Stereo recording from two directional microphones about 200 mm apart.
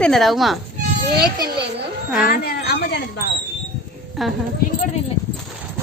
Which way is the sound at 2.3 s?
55° left (ahead or behind).